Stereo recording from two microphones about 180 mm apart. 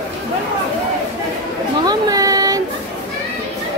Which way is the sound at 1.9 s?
20° right (ahead or behind).